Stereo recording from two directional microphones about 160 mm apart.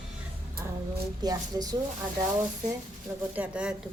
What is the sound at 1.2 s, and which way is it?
Speech, 25° right (ahead or behind).